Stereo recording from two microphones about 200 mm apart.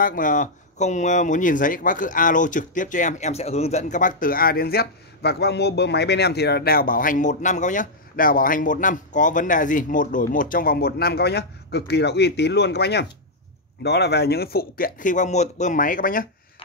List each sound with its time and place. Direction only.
0.0 s speech: 40° left (ahead or behind)